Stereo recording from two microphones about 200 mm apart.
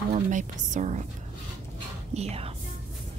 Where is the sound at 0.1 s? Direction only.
40° right (ahead or behind).